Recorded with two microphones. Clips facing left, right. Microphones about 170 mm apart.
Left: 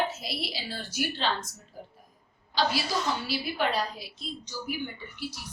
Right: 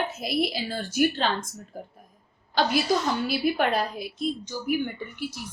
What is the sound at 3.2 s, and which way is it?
A woman's voice, 55° right (ahead or behind).